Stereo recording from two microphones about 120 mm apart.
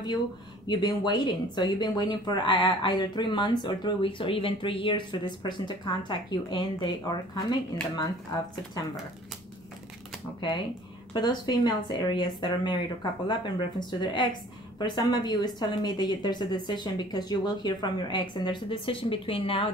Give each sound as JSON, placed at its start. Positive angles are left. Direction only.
{"t": 0.7, "sound": "speech", "side_deg": 35}
{"t": 11.1, "sound": "speech", "side_deg": 35}